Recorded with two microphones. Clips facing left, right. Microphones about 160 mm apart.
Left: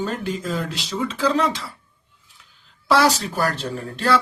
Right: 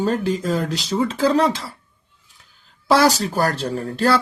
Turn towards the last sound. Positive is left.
turn(degrees=-40)  # may be behind; listen again after turning